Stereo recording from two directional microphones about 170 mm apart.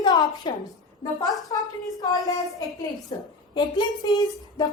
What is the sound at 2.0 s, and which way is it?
A woman's voice, 20° left (ahead or behind).